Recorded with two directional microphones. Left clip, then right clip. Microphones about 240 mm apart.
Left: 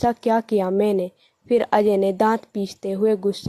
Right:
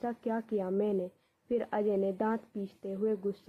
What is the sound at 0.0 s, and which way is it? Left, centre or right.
A woman's voice, left.